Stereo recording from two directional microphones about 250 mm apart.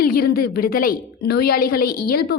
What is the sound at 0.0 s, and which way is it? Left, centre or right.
A woman's voice, left.